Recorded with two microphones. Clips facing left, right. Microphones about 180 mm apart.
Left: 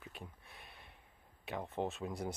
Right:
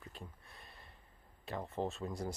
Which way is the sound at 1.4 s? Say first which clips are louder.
Even; centre (ahead or behind).